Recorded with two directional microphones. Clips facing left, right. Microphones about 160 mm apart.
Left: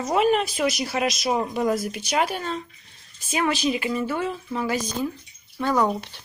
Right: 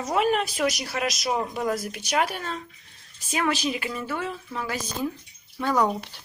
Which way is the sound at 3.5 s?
Centre (ahead or behind).